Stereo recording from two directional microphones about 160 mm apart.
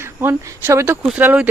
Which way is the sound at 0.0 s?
15° right (ahead or behind).